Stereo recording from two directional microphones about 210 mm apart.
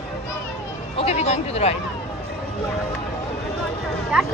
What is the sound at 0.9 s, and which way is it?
Speech, 30° left (ahead or behind).